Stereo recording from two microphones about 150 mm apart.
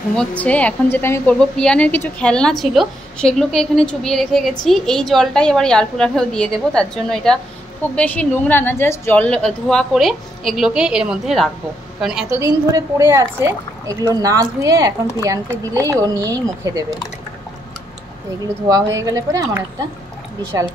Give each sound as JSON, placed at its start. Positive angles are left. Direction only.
{"t": 0.1, "sound": "a woman's voice", "side_deg": 5}
{"t": 12.3, "sound": "speech", "side_deg": -20}
{"t": 18.7, "sound": "speech", "side_deg": -25}